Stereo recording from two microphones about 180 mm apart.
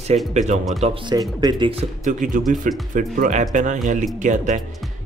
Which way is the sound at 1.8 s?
45° right (ahead or behind).